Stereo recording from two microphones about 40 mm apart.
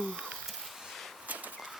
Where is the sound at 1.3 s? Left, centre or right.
Right.